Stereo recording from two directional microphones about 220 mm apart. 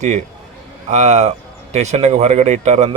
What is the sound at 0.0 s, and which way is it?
Speech, 30° right (ahead or behind).